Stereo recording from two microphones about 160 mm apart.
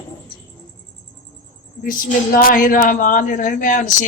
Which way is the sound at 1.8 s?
60° left (ahead or behind).